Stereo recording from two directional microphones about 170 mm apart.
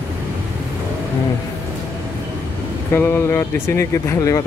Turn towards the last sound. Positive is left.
turn(degrees=20)  # may be behind; listen again after turning